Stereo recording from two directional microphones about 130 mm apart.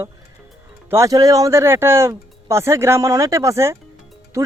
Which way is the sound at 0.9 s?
25° right (ahead or behind).